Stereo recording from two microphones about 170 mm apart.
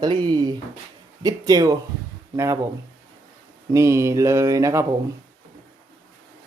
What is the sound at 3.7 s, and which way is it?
Mantra, 15° right (ahead or behind).